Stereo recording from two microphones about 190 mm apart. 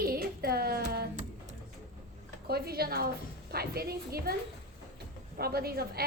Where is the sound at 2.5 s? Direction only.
55° right (ahead or behind).